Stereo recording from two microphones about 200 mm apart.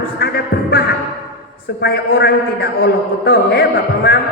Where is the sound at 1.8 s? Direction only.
55° left (ahead or behind).